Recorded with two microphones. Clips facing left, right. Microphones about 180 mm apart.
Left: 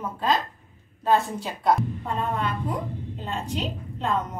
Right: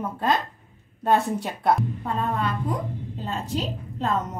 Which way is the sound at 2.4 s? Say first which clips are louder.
Right 1 dB; 40° right (ahead or behind).